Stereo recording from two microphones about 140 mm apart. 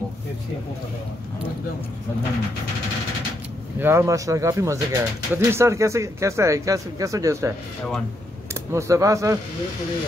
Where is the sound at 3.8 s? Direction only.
15° right (ahead or behind).